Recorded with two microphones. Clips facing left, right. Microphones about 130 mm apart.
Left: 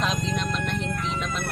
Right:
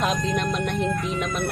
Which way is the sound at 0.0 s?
60° right (ahead or behind).